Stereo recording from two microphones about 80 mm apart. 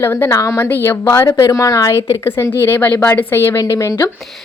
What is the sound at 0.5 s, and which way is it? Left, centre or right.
Speech, left.